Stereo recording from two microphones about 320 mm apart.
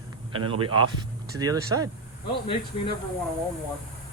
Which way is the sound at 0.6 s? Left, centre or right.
Centre.